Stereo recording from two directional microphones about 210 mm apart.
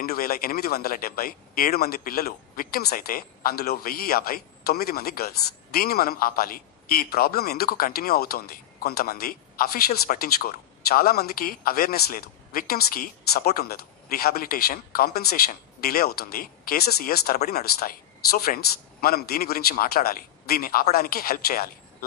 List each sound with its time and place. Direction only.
0.0 s a man's voice: 45° left (ahead or behind)